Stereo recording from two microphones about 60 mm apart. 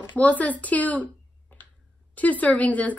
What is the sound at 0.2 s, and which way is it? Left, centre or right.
Speech, left.